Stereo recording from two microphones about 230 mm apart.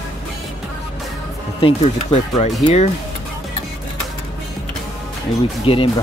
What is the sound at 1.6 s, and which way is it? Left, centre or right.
Speech, left.